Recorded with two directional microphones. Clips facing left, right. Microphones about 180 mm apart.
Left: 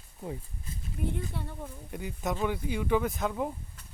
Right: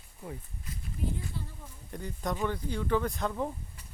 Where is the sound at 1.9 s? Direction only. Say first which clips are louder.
Left 1 dB; 5° left (ahead or behind).